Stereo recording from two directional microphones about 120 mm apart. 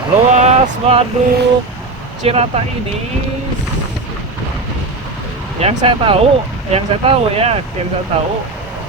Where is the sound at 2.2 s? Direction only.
55° right (ahead or behind).